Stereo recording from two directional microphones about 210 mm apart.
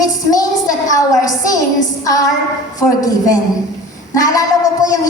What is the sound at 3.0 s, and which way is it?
A woman's voice, 15° left (ahead or behind).